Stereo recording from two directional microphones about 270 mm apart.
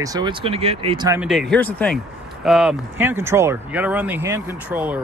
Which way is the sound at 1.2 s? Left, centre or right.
Centre.